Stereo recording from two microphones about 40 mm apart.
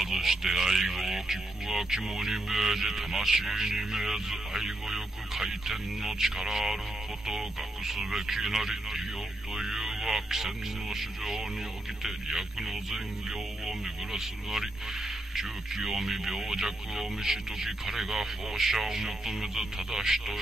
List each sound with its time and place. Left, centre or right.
0.0 s speech: centre